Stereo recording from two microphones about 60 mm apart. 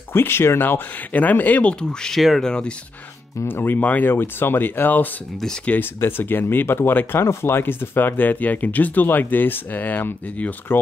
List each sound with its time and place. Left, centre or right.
0.1 s speech: left; by 2.7 s centre
3.4 s speech: left